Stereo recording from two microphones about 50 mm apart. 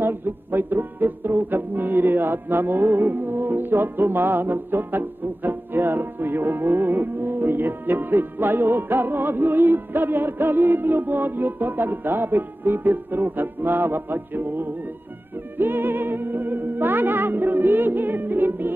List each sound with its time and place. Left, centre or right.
0.0 s music: right
15.5 s speech: right